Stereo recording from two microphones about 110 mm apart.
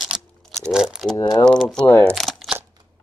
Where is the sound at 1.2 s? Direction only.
40° left (ahead or behind).